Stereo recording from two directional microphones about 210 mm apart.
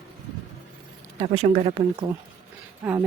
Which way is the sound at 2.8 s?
10° right (ahead or behind).